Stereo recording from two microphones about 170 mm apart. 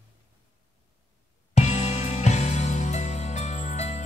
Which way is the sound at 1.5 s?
40° left (ahead or behind).